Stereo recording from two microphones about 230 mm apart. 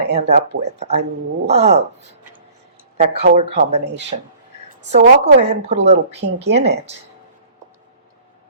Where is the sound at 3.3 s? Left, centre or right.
Right.